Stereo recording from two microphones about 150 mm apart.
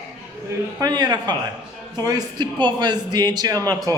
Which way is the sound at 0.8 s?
25° right (ahead or behind).